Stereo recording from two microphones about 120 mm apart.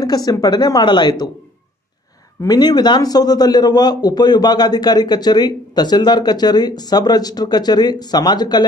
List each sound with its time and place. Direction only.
0.0 s a man's voice: 30° left (ahead or behind)
2.4 s a man's voice: 35° left (ahead or behind)